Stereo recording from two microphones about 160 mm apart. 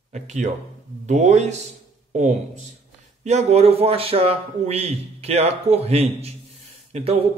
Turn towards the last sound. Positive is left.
turn(degrees=-40)  # may be behind; listen again after turning